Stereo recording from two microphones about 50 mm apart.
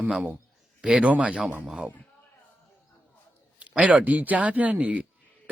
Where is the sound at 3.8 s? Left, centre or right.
Right.